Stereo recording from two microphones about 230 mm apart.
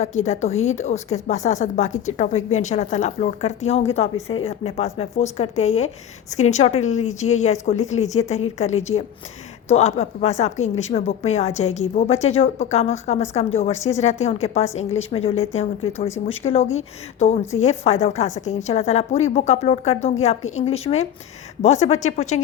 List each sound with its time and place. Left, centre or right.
0.0 s a woman's voice: left